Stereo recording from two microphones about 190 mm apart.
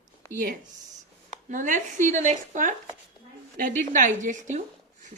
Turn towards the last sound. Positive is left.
turn(degrees=-40)  # may be behind; listen again after turning